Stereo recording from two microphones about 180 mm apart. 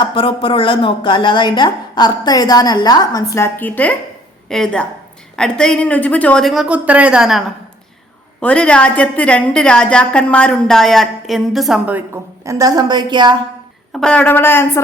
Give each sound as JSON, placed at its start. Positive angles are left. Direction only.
{"t": 0.0, "sound": "a woman's voice", "side_deg": 30}
{"t": 13.9, "sound": "a woman's voice", "side_deg": 5}